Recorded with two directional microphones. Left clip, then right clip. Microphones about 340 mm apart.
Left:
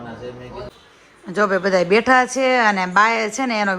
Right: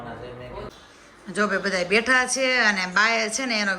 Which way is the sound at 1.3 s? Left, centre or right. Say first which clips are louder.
Left 6 dB; centre.